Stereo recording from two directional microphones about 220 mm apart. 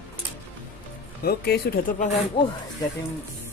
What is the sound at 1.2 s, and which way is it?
Speech, 45° left (ahead or behind).